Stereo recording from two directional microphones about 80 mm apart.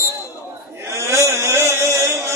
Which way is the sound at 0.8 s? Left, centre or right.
Right.